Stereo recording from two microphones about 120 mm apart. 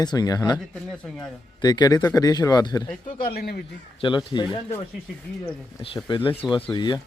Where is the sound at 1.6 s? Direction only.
35° left (ahead or behind).